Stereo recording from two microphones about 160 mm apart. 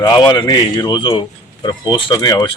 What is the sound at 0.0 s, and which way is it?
A man's voice, 25° left (ahead or behind).